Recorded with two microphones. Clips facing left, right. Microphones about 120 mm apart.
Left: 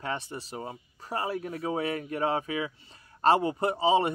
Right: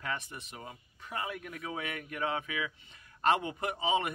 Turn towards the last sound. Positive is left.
turn(degrees=30)  # may be behind; listen again after turning